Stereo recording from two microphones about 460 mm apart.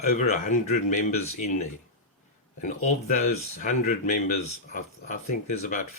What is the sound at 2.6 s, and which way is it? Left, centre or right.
A man's voice, centre.